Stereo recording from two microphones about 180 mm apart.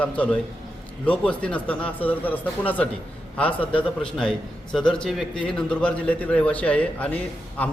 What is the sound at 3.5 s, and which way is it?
Speech, 30° left (ahead or behind).